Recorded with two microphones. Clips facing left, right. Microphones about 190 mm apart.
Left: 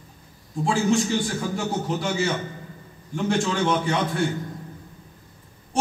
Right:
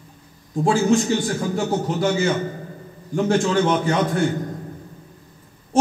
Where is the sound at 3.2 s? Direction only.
45° right (ahead or behind).